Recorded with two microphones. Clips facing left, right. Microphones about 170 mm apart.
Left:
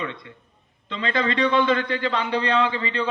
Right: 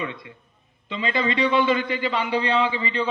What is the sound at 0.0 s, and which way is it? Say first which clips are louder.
A man's voice: even; 10° right (ahead or behind).